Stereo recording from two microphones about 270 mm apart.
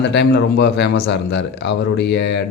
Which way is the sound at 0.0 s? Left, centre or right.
Left.